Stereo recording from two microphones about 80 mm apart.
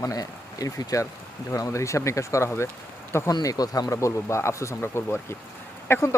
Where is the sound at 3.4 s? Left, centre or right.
Left.